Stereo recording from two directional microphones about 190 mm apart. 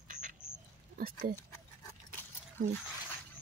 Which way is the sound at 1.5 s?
10° left (ahead or behind).